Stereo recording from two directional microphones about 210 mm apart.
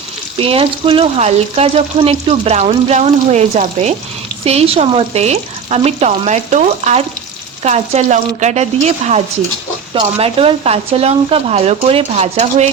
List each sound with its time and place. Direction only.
0.3 s speech: 25° right (ahead or behind)
4.4 s frying: 30° right (ahead or behind)
9.9 s speech: 25° right (ahead or behind)